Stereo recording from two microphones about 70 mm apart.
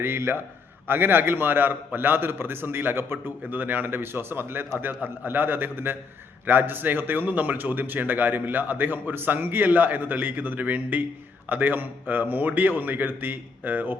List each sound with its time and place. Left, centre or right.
0.0 s a man's voice: right